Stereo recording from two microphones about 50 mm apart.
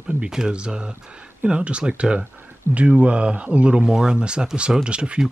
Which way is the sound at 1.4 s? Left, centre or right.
Right.